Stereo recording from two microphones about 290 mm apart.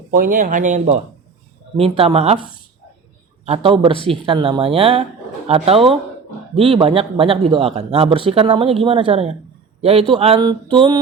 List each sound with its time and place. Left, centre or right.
0.1 s speech: right